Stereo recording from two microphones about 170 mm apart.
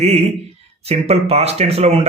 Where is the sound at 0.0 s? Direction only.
40° right (ahead or behind).